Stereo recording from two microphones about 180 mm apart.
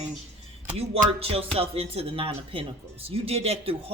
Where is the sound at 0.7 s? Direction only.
35° right (ahead or behind).